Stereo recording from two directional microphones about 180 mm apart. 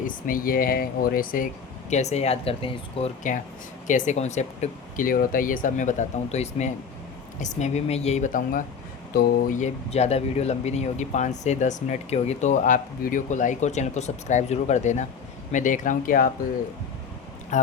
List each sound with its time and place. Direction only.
0.0 s speech: 50° left (ahead or behind)
1.9 s speech: 40° left (ahead or behind)
3.8 s speech: 45° left (ahead or behind)
17.5 s speech: 40° left (ahead or behind)